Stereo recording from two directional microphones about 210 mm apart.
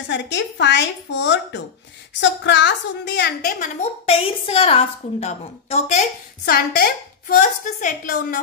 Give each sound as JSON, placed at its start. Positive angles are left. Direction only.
{"t": 0.1, "sound": "a woman's voice", "side_deg": 55}
{"t": 4.0, "sound": "a woman's voice", "side_deg": 25}
{"t": 6.4, "sound": "a woman's voice", "side_deg": 45}